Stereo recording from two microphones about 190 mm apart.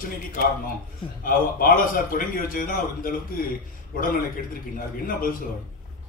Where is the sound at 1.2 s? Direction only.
50° left (ahead or behind).